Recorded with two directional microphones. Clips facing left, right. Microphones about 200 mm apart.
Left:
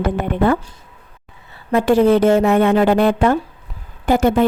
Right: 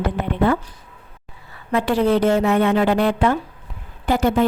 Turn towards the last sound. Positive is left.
turn(degrees=50)  # may be behind; listen again after turning